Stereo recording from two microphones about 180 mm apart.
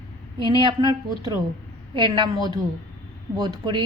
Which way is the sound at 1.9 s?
25° right (ahead or behind).